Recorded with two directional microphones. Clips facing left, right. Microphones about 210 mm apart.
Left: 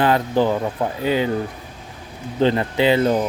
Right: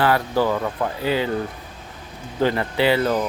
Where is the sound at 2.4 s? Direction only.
20° left (ahead or behind).